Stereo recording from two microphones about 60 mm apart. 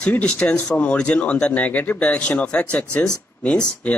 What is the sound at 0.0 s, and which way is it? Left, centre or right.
Speech, left.